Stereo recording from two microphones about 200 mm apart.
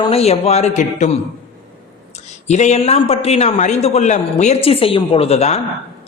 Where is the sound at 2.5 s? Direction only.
35° left (ahead or behind).